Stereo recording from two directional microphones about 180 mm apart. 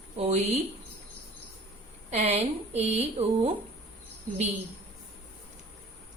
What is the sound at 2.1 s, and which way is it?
Speech, 35° right (ahead or behind).